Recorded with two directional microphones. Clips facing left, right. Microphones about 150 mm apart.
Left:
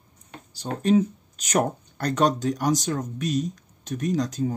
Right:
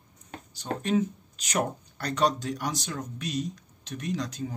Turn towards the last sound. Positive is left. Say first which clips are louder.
# left 7 dB
turn(degrees=45)  # may be behind; listen again after turning